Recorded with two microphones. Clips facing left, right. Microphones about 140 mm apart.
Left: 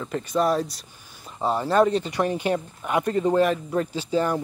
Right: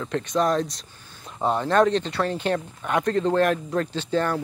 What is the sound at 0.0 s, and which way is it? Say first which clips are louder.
Speech: even; 5° left (ahead or behind).